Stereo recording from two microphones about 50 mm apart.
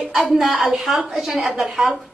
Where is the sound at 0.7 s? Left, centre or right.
Centre.